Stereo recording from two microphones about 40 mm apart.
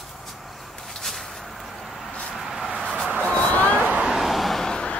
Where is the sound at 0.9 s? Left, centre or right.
Centre.